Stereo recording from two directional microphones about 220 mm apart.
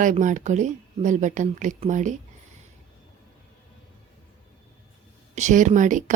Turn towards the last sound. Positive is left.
turn(degrees=-35)  # may be behind; listen again after turning